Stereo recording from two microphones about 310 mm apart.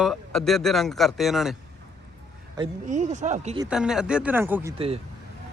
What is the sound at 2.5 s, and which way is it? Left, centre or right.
Speech, centre.